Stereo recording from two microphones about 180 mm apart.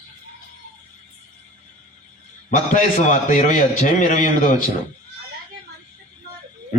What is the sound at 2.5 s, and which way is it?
A man's voice, 45° left (ahead or behind).